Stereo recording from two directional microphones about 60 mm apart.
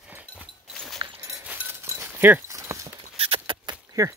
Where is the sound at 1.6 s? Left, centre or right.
Right.